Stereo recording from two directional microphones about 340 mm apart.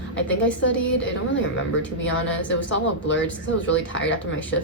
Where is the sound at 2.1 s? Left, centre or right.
Left.